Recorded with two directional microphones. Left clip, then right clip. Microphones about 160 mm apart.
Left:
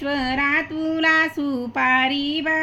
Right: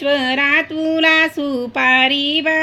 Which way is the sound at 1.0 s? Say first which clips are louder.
Right 4 dB; 75° right (ahead or behind).